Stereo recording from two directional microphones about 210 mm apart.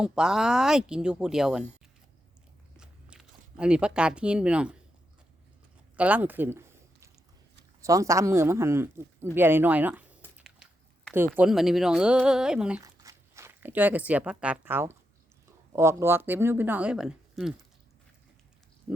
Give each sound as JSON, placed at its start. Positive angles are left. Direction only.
{"t": 0.0, "sound": "speech", "side_deg": -5}
{"t": 2.7, "sound": "biting", "side_deg": -5}
{"t": 6.0, "sound": "a sound", "side_deg": -5}
{"t": 7.8, "sound": "speech", "side_deg": -15}
{"t": 12.8, "sound": "speech", "side_deg": -15}
{"t": 18.9, "sound": "speech", "side_deg": -5}